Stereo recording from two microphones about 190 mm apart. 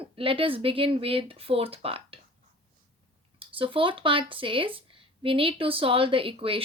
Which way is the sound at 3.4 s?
30° right (ahead or behind).